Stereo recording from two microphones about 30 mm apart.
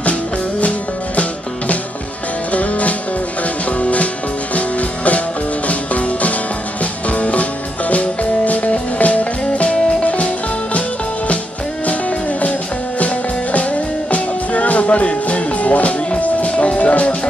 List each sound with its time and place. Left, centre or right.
0.6 s music: left
2.5 s music: left
11.8 s music: left